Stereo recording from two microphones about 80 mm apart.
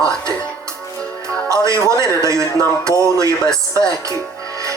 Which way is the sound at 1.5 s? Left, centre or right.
Right.